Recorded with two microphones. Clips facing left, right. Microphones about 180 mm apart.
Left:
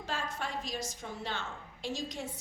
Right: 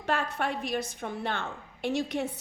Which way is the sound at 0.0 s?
60° right (ahead or behind).